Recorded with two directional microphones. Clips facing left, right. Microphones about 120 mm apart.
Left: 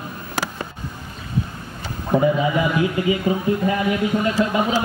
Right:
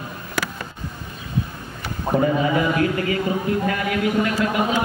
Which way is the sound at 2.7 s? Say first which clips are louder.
Left 1 dB; 15° left (ahead or behind).